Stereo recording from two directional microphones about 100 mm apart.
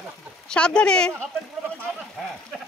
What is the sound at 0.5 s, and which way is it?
Speech, 10° left (ahead or behind).